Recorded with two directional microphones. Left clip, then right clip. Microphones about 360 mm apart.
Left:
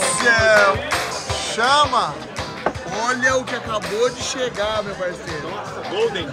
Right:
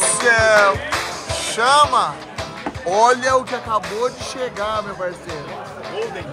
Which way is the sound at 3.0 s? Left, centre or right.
Centre.